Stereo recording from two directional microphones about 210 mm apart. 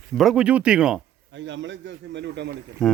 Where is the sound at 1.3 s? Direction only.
60° right (ahead or behind).